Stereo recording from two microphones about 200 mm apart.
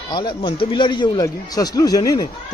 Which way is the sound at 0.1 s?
25° left (ahead or behind).